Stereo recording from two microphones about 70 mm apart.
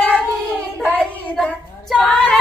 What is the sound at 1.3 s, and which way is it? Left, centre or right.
Child singing, centre.